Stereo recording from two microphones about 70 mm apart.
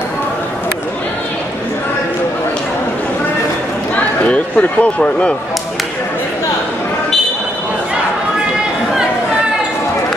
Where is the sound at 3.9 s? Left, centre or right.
Centre.